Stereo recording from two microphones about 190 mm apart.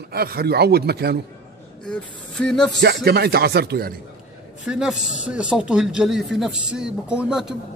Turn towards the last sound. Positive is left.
turn(degrees=-5)  # may be behind; listen again after turning